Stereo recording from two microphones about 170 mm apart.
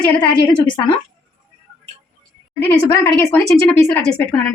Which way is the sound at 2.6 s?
15° left (ahead or behind).